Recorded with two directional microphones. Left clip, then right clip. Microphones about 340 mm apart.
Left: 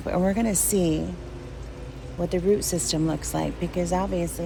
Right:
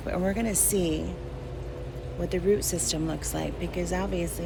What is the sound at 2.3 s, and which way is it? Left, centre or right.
Speech, centre.